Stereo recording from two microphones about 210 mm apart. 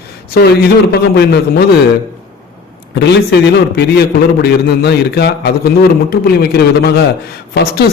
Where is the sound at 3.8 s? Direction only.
50° left (ahead or behind).